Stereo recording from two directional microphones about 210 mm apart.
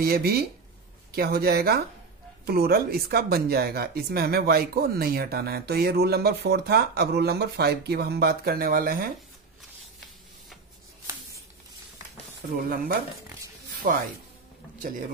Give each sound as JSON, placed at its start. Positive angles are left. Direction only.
{"t": 0.0, "sound": "speech", "side_deg": -45}
{"t": 12.6, "sound": "speech", "side_deg": -45}